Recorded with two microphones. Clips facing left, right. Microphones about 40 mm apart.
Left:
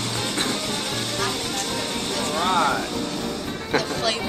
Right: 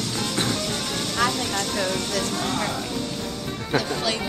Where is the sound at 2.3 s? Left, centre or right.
Left.